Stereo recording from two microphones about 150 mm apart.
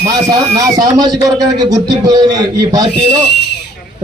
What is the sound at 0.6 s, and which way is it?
A man's voice, 25° right (ahead or behind).